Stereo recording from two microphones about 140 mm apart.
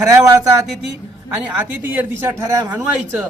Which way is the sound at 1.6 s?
15° right (ahead or behind).